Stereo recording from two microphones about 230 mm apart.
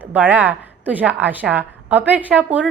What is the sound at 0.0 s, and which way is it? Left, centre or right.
A woman's voice, centre.